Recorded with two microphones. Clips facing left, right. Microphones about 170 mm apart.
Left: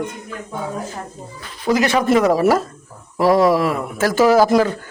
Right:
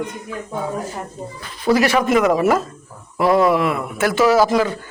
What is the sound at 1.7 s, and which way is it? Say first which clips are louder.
A man's voice: even; 25° left (ahead or behind).